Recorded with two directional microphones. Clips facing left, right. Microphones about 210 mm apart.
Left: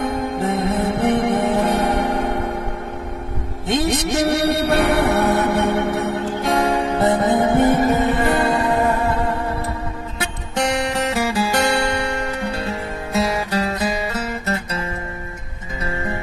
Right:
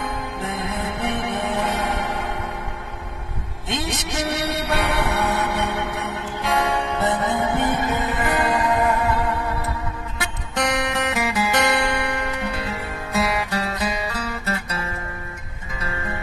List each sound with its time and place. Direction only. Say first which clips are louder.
0.0 s music: left 7 dB; 40° left (ahead or behind)
3.6 s music: left 8 dB; 40° left (ahead or behind)
10.5 s music: left 2 dB; 30° left (ahead or behind)